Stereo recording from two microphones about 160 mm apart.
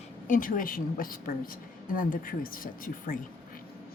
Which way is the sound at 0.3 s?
55° left (ahead or behind).